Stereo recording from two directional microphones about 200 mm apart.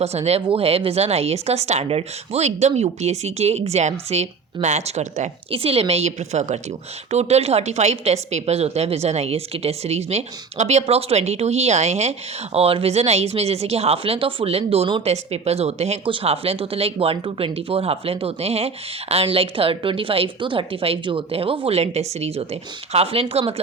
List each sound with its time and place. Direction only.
0.0 s a woman's voice: 30° right (ahead or behind)